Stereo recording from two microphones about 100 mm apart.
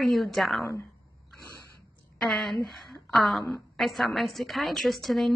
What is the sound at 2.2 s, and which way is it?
A woman's voice, centre (ahead or behind).